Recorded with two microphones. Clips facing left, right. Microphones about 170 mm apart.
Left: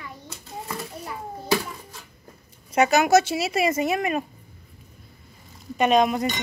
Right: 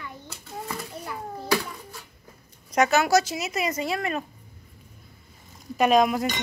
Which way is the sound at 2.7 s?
15° left (ahead or behind).